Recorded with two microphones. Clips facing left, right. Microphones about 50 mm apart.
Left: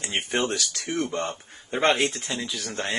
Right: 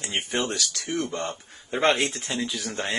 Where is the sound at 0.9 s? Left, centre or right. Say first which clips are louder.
Left 1 dB; centre.